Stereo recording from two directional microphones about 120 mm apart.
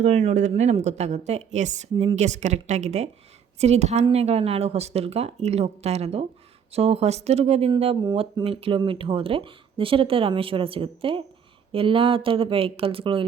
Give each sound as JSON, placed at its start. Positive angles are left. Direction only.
{"t": 0.0, "sound": "a woman's voice", "side_deg": -60}